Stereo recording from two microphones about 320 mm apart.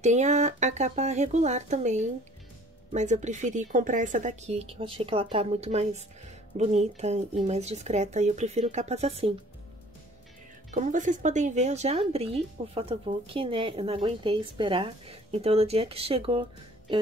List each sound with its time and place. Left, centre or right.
0.0 s speech: right
10.7 s speech: right